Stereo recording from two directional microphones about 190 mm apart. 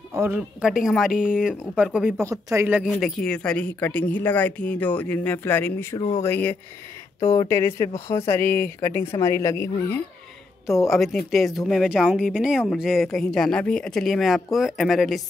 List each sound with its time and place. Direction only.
0.1 s speech: 10° right (ahead or behind); by 5.9 s 10° left (ahead or behind)
5.9 s speech: 35° left (ahead or behind)
6.2 s speech: 10° left (ahead or behind)
10.9 s speech: centre (ahead or behind)